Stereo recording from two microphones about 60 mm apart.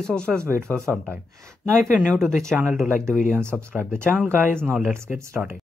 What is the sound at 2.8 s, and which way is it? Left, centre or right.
Speech, right.